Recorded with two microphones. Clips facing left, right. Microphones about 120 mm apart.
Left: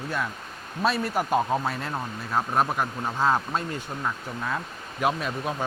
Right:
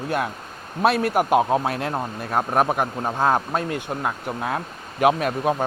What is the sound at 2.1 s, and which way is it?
Speech, 55° right (ahead or behind).